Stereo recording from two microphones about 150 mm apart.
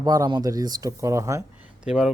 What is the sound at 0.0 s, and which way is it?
Speech, 25° right (ahead or behind).